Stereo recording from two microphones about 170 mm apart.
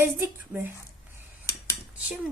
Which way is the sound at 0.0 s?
15° right (ahead or behind).